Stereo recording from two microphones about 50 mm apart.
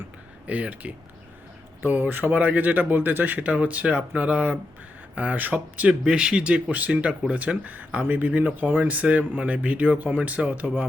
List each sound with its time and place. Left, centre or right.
0.4 s speech: right
1.8 s a man's voice: right
5.9 s speech: centre
6.7 s a man's voice: right
8.3 s a man's voice: right